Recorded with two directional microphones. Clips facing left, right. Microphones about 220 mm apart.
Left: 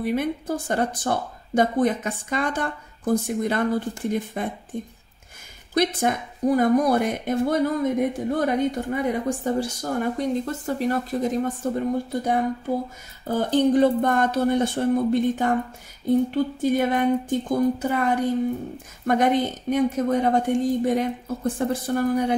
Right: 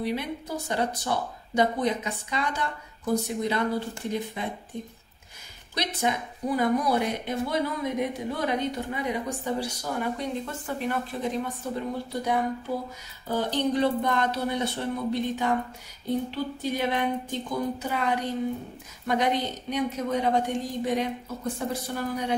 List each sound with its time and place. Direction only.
0.0 s speech: 50° left (ahead or behind)